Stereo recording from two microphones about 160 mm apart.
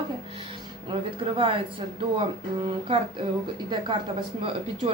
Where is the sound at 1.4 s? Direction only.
35° right (ahead or behind).